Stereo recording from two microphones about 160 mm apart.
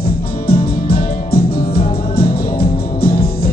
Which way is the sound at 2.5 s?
70° left (ahead or behind).